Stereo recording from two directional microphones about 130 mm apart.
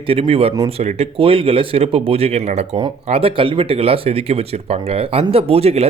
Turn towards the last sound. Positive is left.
turn(degrees=-50)  # may be behind; listen again after turning